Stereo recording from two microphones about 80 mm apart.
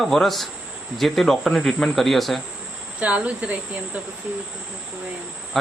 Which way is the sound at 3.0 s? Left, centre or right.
Centre.